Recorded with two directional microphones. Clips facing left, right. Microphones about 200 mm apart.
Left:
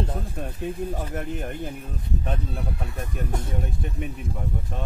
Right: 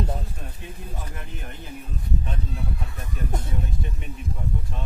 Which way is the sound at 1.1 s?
50° left (ahead or behind).